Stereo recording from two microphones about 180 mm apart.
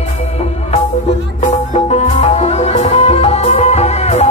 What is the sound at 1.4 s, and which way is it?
Music, 35° left (ahead or behind).